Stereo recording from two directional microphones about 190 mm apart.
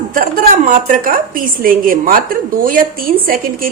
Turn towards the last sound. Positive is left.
turn(degrees=-50)  # may be behind; listen again after turning